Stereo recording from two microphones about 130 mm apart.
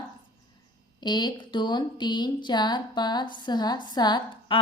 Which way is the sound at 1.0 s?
35° left (ahead or behind).